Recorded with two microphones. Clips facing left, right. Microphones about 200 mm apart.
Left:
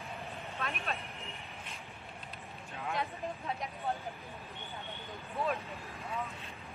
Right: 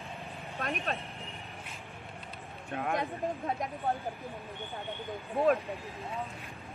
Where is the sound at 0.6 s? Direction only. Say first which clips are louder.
Right 5 dB; 40° right (ahead or behind).